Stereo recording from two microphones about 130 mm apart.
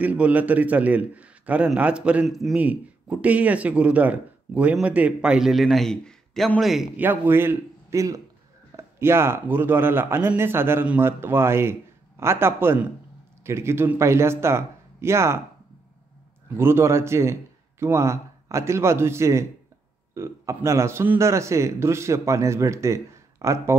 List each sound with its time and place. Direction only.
0.0 s speech: 10° right (ahead or behind)
2.6 s speech: 10° right (ahead or behind)
7.0 s a man's voice: 15° right (ahead or behind)
16.4 s a man's voice: 20° right (ahead or behind)